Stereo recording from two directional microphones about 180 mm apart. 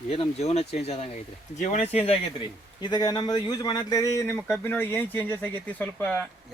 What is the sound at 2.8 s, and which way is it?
Speech, 25° left (ahead or behind).